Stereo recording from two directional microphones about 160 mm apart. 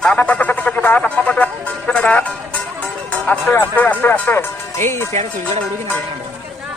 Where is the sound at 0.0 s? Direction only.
10° left (ahead or behind).